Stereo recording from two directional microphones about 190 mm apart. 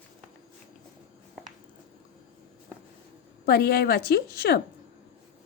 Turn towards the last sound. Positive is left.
turn(degrees=55)  # may be behind; listen again after turning